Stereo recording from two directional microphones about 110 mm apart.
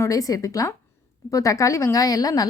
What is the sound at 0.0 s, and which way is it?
A woman's voice, 30° left (ahead or behind).